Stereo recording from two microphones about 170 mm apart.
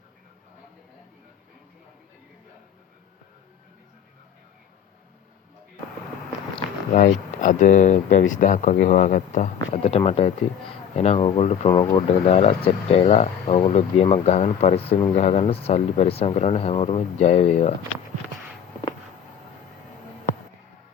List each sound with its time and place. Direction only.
6.6 s speech: 45° left (ahead or behind)